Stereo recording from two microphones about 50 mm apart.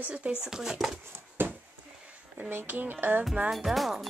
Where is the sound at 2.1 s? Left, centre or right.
Right.